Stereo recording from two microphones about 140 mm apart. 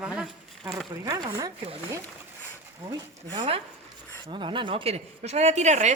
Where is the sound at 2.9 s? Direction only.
35° right (ahead or behind).